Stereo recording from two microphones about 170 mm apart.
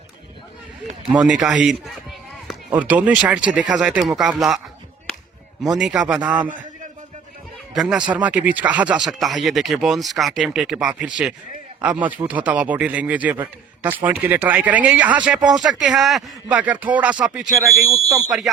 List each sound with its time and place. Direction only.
1.1 s speech: 5° right (ahead or behind)
5.6 s speech: centre (ahead or behind)
7.7 s speech: 5° right (ahead or behind)
17.8 s speech: 20° right (ahead or behind)
18.3 s speech: centre (ahead or behind)